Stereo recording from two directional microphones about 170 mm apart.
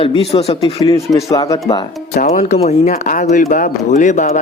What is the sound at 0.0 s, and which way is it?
Speech, 35° left (ahead or behind).